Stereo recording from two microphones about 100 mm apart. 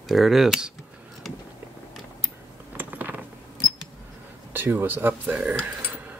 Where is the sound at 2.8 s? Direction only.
20° right (ahead or behind).